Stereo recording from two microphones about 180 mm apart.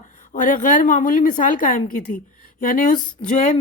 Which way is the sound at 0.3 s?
45° left (ahead or behind).